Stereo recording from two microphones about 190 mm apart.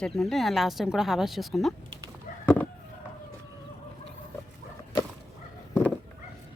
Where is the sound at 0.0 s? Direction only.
Centre (ahead or behind).